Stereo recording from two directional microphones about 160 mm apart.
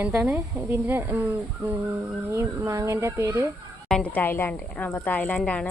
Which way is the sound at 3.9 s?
5° left (ahead or behind).